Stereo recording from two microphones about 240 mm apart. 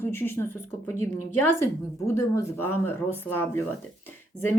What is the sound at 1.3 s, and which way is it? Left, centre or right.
Speech, left.